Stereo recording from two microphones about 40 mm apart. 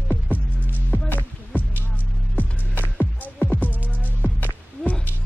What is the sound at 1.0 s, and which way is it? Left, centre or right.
Music, left.